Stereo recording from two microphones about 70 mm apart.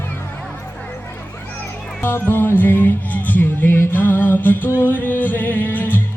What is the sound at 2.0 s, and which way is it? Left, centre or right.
Music, left.